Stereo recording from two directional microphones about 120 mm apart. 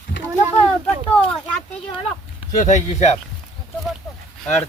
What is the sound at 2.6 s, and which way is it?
Speech, 75° left (ahead or behind).